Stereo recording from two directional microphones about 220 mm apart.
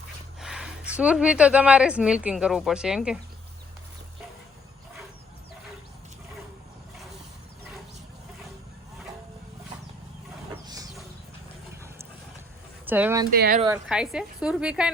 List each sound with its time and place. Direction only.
0.3 s a woman's voice: centre (ahead or behind)
10.5 s a sound: 15° right (ahead or behind)
12.8 s speech: 10° right (ahead or behind)
13.3 s speech: 45° right (ahead or behind)
13.8 s a woman's voice: 5° right (ahead or behind)